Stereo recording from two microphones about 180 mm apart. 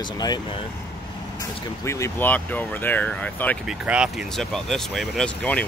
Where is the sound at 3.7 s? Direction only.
5° right (ahead or behind).